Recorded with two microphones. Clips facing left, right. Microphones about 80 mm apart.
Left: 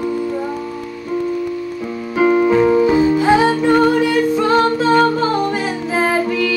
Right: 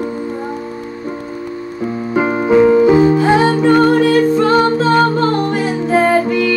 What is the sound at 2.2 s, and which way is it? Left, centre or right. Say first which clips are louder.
Keyboard: right 1 dB; right.